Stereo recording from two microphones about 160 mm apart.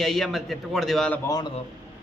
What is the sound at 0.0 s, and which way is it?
A man's voice, 5° left (ahead or behind).